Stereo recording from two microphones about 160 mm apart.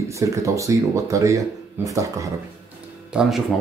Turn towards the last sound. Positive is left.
turn(degrees=-5)  # may be behind; listen again after turning